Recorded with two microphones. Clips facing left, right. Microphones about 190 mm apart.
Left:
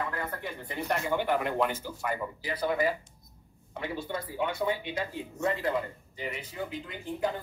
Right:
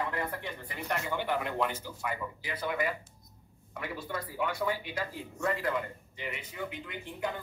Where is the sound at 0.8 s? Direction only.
45° left (ahead or behind); by 5.8 s 25° left (ahead or behind).